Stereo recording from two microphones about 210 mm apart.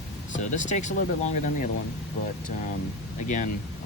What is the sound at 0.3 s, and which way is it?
Speech, 35° left (ahead or behind).